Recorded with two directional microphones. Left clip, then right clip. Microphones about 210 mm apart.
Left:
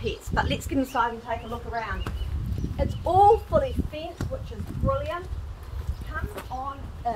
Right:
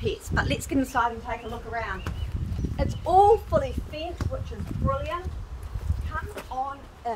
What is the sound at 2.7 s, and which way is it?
Speech, 30° right (ahead or behind).